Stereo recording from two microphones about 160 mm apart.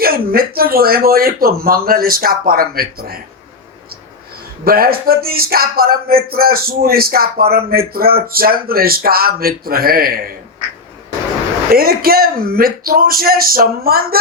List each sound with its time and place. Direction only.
0.0 s speech: 70° right (ahead or behind)
4.6 s speech: 65° right (ahead or behind)
11.7 s speech: 70° right (ahead or behind)